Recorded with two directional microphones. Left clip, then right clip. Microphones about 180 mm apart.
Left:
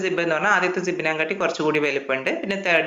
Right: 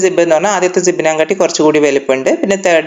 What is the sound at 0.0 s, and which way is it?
Speech, 30° right (ahead or behind).